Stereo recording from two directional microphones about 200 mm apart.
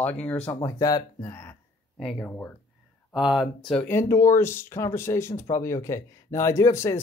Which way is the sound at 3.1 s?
5° right (ahead or behind).